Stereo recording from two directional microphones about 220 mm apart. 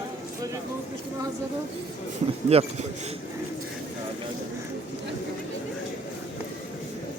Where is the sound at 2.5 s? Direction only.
25° right (ahead or behind).